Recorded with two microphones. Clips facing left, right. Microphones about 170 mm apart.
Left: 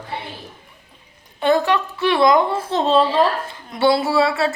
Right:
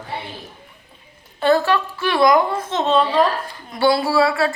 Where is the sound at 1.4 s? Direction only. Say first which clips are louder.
Even; 20° left (ahead or behind).